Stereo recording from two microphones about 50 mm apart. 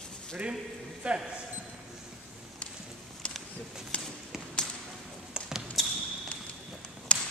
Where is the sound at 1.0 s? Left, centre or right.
Right.